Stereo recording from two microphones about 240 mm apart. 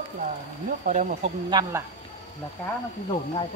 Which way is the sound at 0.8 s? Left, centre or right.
Right.